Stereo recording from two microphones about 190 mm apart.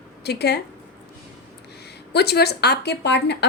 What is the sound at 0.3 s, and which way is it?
Speech, 60° left (ahead or behind).